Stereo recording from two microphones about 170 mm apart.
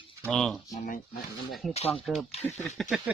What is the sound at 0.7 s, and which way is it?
Speech, 55° left (ahead or behind).